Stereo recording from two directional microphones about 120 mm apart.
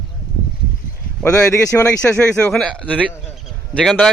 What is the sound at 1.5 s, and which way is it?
Speech, 25° left (ahead or behind).